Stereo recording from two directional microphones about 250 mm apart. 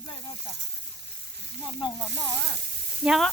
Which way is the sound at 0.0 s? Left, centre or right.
Centre.